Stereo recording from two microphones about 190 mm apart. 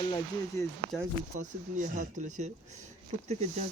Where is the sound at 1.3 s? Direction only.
40° right (ahead or behind).